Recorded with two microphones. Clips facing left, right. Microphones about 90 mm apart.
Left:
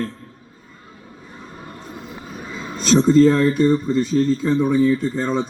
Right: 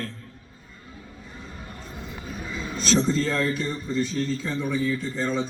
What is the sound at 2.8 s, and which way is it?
Speech, 40° left (ahead or behind).